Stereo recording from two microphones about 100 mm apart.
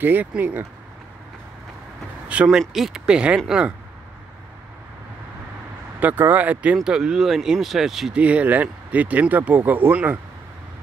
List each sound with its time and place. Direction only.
0.0 s speech: 20° right (ahead or behind)
2.2 s speech: 10° right (ahead or behind)
5.9 s speech: 20° right (ahead or behind)